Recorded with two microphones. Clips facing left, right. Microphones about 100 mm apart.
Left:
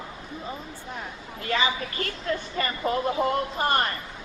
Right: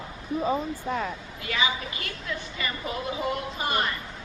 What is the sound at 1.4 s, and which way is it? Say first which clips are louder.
A woman's voice: left 2 dB; 40° left (ahead or behind).